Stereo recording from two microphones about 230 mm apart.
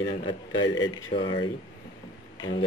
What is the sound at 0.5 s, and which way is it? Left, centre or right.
Speech, left.